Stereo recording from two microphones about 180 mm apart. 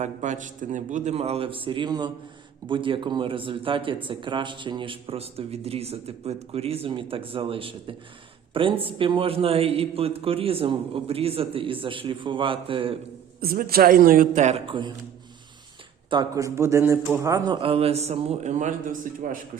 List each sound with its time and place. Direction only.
0.0 s a man's voice: 40° right (ahead or behind)
13.4 s a man's voice: 55° right (ahead or behind); by 14.9 s 25° right (ahead or behind)
16.0 s a man's voice: 20° right (ahead or behind); by 19.4 s 50° right (ahead or behind)